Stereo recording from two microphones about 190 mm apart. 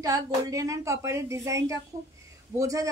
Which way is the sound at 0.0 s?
20° right (ahead or behind).